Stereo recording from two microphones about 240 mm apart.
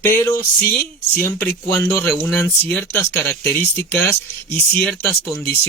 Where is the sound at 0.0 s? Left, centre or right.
Centre.